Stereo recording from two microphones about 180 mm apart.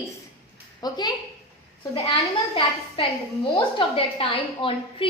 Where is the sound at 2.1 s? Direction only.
30° left (ahead or behind).